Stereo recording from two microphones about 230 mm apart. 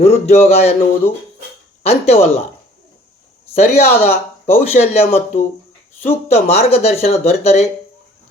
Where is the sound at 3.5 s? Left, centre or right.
Left.